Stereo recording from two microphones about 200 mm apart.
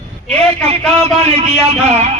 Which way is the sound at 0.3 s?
30° right (ahead or behind).